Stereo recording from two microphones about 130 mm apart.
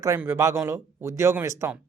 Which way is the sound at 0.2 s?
20° right (ahead or behind).